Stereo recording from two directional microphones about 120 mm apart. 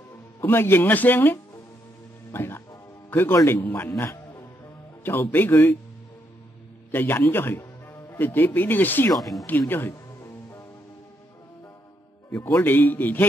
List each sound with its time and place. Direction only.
0.4 s a man's voice: 20° left (ahead or behind)
4.0 s music: 25° left (ahead or behind)
5.0 s speech: 15° left (ahead or behind)
6.9 s speech: 15° left (ahead or behind)
9.1 s speech: centre (ahead or behind)
9.5 s music: 20° left (ahead or behind)
12.4 s speech: 25° left (ahead or behind)
12.6 s speech: 15° left (ahead or behind)